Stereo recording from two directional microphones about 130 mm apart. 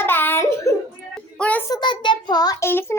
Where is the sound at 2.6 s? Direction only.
20° left (ahead or behind).